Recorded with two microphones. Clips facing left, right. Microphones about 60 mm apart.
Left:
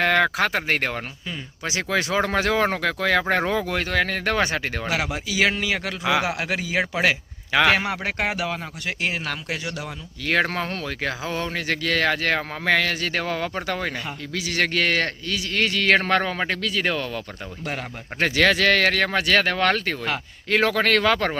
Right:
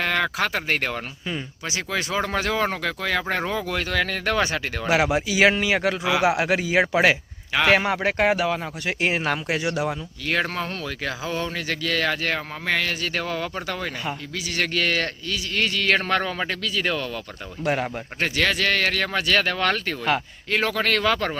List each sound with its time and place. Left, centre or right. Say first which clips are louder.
0.0 s speech: left 4 dB; left
1.9 s speech: left 3 dB; left
5.0 s speech: right 4 dB; centre
9.0 s speech: right 5 dB; right
10.2 s speech: left 2 dB; left
14.3 s speech: left 3 dB; left
17.7 s speech: right 7 dB; centre
18.2 s speech: left 4 dB; left
20.5 s speech: left 3 dB; left